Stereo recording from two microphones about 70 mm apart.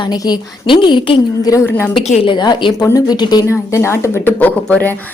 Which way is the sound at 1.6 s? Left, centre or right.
Left.